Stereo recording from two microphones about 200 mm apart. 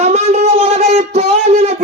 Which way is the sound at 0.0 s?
30° right (ahead or behind).